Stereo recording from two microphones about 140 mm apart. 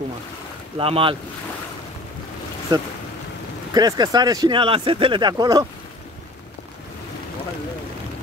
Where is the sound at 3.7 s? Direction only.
30° right (ahead or behind).